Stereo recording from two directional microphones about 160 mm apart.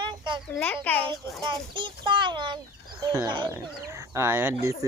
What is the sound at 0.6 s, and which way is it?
Speech, 10° left (ahead or behind).